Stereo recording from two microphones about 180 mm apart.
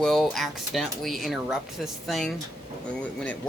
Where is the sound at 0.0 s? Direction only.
Centre (ahead or behind).